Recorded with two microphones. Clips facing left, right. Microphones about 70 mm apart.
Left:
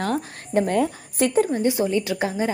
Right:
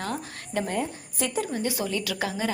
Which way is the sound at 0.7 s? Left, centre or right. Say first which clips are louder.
Left 8 dB; left.